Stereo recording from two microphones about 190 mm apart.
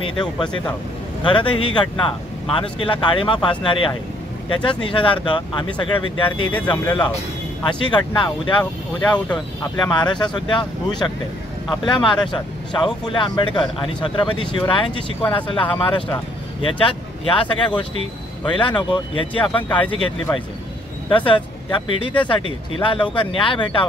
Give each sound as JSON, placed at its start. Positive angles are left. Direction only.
{"t": 0.2, "sound": "speech", "side_deg": 5}
{"t": 1.2, "sound": "speech", "side_deg": 25}
{"t": 9.1, "sound": "speech", "side_deg": 5}
{"t": 9.8, "sound": "speech", "side_deg": 25}